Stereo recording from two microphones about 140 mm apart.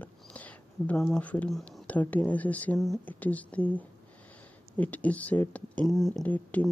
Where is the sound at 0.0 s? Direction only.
10° left (ahead or behind).